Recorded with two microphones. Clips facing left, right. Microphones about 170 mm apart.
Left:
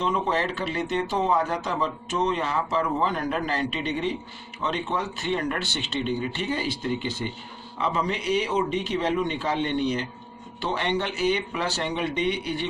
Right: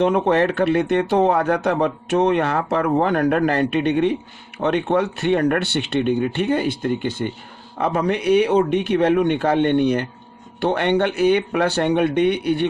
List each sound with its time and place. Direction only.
0.0 s speech: 65° right (ahead or behind)